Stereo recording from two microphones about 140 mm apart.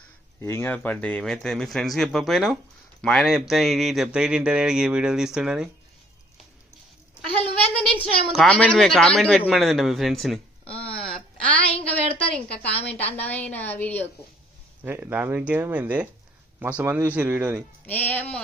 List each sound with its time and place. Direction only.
0.4 s a man's voice: 15° left (ahead or behind); by 5.7 s 5° right (ahead or behind)
7.8 s a man's voice: 5° left (ahead or behind)
10.8 s a sound: 10° left (ahead or behind)
13.1 s a woman's voice: 10° left (ahead or behind)
14.9 s speech: 10° right (ahead or behind)
17.8 s a woman's voice: 10° left (ahead or behind)